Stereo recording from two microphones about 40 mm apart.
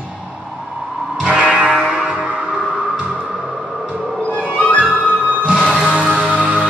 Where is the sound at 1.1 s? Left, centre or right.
Right.